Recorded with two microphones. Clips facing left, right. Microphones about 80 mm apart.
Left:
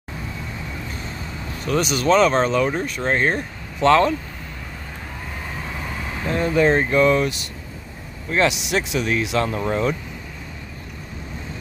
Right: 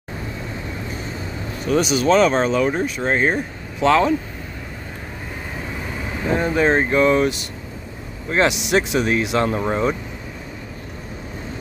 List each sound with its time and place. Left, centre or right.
1.7 s speech: centre
6.2 s speech: centre
8.6 s speech: right
9.4 s speech: right